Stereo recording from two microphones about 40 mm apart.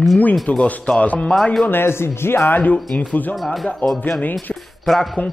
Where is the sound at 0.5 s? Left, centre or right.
Left.